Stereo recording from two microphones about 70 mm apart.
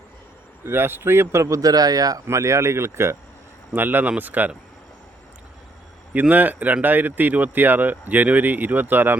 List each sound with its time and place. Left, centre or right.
0.6 s speech: right
2.2 s speech: right
3.7 s speech: right
6.1 s speech: right